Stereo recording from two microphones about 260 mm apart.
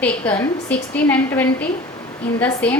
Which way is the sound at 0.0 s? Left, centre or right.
Centre.